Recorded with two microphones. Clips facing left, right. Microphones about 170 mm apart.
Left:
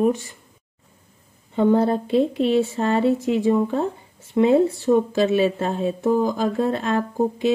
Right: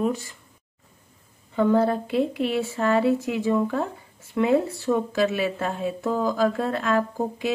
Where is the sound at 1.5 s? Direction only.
25° left (ahead or behind).